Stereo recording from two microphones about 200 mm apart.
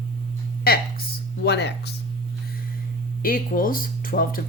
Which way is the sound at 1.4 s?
55° left (ahead or behind).